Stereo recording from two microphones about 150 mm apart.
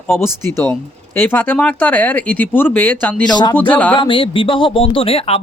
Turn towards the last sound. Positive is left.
turn(degrees=40)  # may be behind; listen again after turning